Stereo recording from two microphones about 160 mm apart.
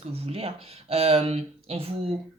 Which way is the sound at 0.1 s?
40° right (ahead or behind).